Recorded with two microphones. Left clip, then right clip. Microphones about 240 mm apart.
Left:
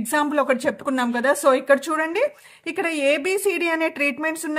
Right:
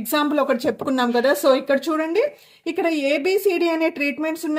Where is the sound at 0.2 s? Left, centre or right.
Left.